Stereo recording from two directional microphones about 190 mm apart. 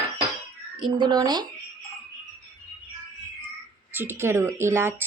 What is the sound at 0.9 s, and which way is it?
Speech, 20° right (ahead or behind).